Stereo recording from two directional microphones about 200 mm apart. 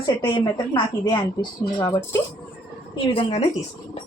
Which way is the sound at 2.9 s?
25° left (ahead or behind).